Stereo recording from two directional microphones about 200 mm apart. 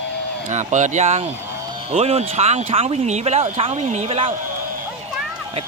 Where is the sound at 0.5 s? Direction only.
35° right (ahead or behind).